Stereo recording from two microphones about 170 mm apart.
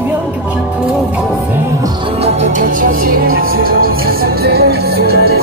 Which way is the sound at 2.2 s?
45° right (ahead or behind).